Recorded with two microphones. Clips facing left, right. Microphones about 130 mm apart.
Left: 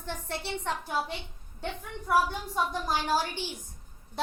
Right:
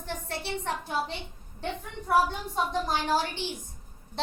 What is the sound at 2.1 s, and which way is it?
A woman's voice, 25° right (ahead or behind).